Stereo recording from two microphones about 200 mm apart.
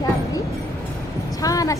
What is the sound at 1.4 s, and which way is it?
Speech, 15° left (ahead or behind).